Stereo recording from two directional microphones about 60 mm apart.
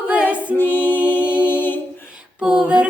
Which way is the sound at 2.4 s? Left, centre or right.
Centre.